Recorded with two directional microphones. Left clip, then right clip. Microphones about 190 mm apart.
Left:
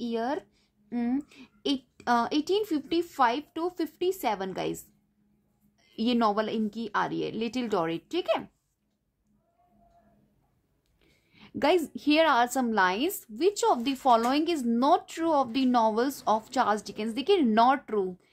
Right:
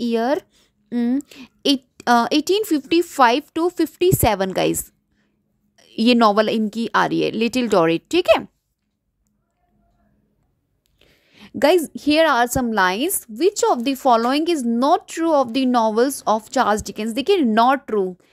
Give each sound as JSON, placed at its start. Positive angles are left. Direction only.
{"t": 0.0, "sound": "speech", "side_deg": -45}
{"t": 1.3, "sound": "a woman's voice", "side_deg": -45}
{"t": 5.8, "sound": "a woman's voice", "side_deg": -40}
{"t": 11.0, "sound": "a woman's voice", "side_deg": -40}